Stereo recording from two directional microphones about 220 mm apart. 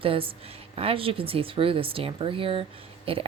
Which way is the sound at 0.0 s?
25° right (ahead or behind).